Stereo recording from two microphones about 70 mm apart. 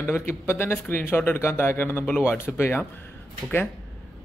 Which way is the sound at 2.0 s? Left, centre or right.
Centre.